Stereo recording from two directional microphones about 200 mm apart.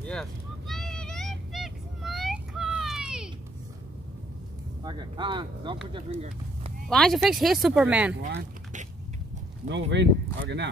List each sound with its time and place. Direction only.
0.0 s vehicle: 5° left (ahead or behind)
4.8 s speech: 25° right (ahead or behind)
6.9 s speech: 5° left (ahead or behind)
9.7 s speech: 65° right (ahead or behind)